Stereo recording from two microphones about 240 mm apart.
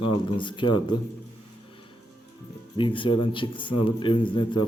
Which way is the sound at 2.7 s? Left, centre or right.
Left.